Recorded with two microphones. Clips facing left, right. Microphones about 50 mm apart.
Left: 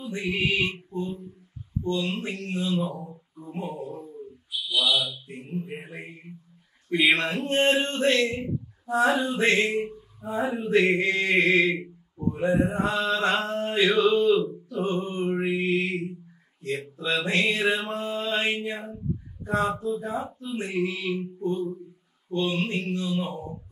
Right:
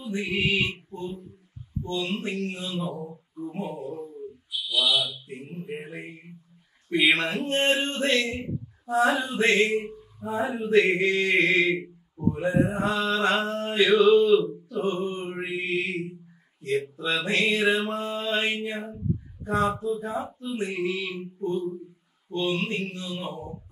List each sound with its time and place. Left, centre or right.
0.0 s music: centre
1.9 s speech: centre
6.9 s male singing: centre
12.4 s mantra: centre
16.6 s male singing: centre